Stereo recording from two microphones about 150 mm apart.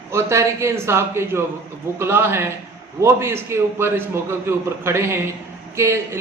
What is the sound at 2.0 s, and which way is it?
Mantra, 15° right (ahead or behind).